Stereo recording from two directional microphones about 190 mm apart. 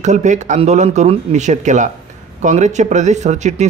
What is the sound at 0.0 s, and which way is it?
Speech, 40° right (ahead or behind).